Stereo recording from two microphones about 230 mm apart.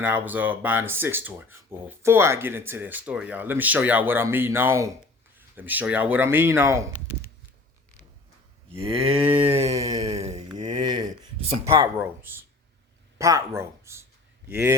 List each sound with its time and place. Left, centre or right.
0.0 s speech: centre
8.8 s speech: centre
10.0 s speech: right
11.6 s speech: centre